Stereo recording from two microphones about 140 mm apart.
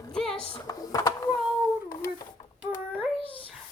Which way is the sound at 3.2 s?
40° left (ahead or behind).